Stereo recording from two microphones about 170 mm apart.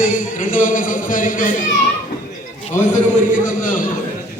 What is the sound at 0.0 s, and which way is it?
Speech, 55° left (ahead or behind).